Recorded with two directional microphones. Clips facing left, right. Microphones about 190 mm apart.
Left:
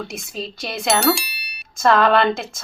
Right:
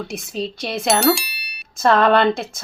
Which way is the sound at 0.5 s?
Centre (ahead or behind).